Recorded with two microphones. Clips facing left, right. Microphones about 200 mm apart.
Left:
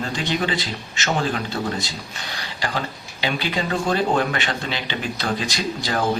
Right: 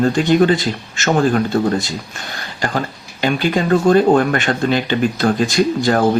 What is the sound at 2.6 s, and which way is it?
Speech, 50° right (ahead or behind).